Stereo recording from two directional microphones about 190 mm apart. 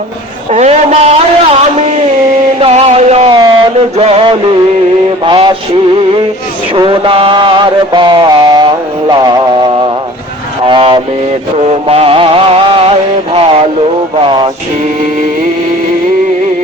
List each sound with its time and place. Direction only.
0.5 s a man's voice: 35° right (ahead or behind)
2.6 s a sound: 30° right (ahead or behind)
5.2 s mantra: 25° right (ahead or behind)
6.7 s mantra: 25° right (ahead or behind)
10.7 s vehicle: 25° right (ahead or behind)
11.6 s music: 35° right (ahead or behind)
13.3 s radio: 30° right (ahead or behind)
14.3 s music: 25° right (ahead or behind)